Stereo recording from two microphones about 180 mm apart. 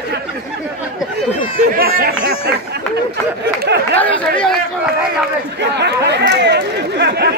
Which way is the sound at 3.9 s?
5° left (ahead or behind).